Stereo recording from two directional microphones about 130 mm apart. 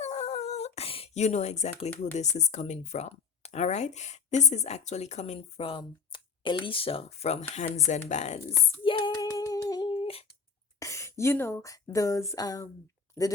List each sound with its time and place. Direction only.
0.0 s humming: 55° left (ahead or behind)
2.1 s speech: 60° left (ahead or behind)
8.8 s female singing: 40° left (ahead or behind)
9.2 s a sound: 25° left (ahead or behind); by 10.2 s 45° left (ahead or behind)
10.8 s speech: 25° left (ahead or behind)